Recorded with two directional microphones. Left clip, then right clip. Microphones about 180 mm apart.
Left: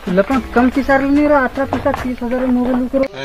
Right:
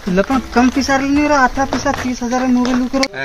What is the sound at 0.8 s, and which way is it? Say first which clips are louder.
Speech: left 2 dB; 50° right (ahead or behind).